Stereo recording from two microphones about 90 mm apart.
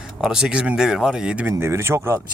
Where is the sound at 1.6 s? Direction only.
30° right (ahead or behind).